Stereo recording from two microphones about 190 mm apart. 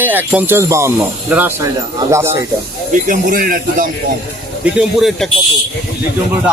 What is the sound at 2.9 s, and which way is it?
Speech, 45° right (ahead or behind).